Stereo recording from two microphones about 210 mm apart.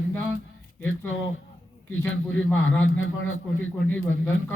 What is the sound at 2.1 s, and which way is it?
A man's voice, 70° left (ahead or behind).